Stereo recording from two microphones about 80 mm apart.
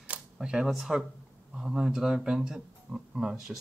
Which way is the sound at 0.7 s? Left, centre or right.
Centre.